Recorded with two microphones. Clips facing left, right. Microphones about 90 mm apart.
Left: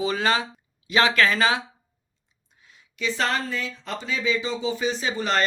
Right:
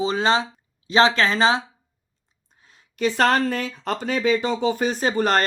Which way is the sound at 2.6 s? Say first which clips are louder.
Right 6 dB; 45° right (ahead or behind).